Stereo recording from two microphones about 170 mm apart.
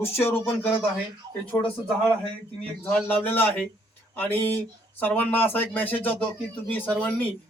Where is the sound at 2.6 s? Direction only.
10° left (ahead or behind).